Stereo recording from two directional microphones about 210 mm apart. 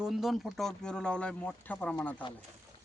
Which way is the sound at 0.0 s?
Centre (ahead or behind).